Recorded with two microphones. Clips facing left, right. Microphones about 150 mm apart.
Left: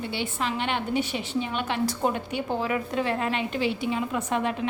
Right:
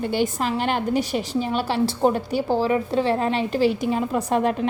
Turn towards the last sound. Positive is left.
turn(degrees=-40)  # may be behind; listen again after turning